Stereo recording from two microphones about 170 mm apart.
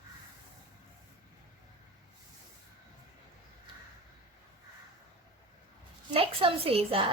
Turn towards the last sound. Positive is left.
turn(degrees=-30)  # may be behind; listen again after turning